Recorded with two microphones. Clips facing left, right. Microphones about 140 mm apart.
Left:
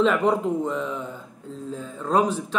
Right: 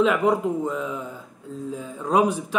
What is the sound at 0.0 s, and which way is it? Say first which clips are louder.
Speech: even; 5° right (ahead or behind).